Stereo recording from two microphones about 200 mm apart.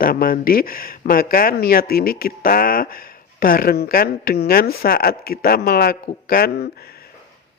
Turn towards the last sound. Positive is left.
turn(degrees=50)  # may be behind; listen again after turning